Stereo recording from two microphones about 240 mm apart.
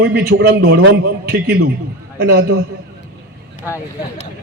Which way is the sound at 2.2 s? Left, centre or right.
Right.